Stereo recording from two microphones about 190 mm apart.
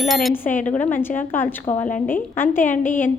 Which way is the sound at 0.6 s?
10° left (ahead or behind).